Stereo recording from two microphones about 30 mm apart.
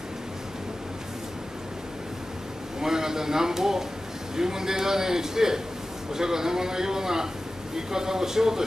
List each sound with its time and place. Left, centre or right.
2.8 s a man's voice: centre